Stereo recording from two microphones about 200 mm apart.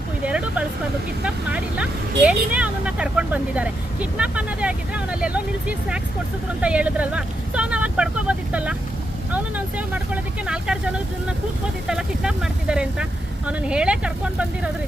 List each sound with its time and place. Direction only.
0.3 s vehicle: 5° right (ahead or behind)
1.2 s speech: 5° right (ahead or behind)